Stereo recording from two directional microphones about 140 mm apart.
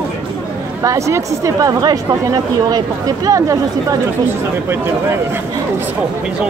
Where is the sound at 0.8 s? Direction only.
20° right (ahead or behind).